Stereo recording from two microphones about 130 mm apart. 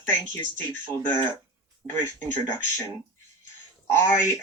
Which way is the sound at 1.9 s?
15° left (ahead or behind).